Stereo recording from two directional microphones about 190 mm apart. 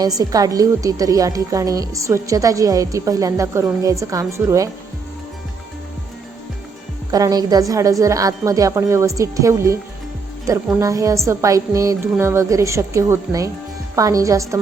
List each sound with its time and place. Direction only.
0.0 s a woman's voice: 20° right (ahead or behind)
7.1 s a woman's voice: 20° right (ahead or behind)